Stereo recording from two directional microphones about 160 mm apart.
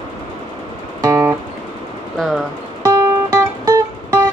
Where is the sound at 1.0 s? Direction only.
20° right (ahead or behind).